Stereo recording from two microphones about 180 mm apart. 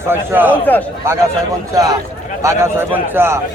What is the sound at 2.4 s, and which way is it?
A man's voice, 15° right (ahead or behind).